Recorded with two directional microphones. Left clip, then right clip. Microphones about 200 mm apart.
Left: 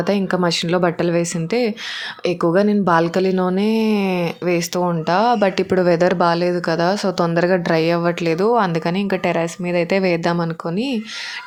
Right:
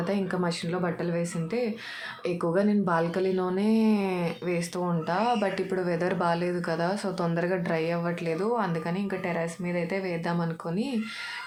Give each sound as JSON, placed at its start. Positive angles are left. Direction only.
{"t": 0.0, "sound": "speech", "side_deg": 40}